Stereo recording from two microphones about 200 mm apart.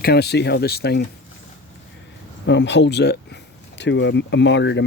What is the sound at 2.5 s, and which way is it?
Speech, 65° left (ahead or behind).